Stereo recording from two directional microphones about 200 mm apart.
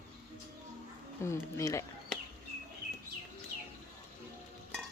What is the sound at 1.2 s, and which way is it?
Speech, 15° left (ahead or behind).